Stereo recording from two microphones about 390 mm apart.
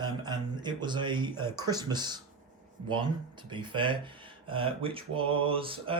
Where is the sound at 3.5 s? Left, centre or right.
Centre.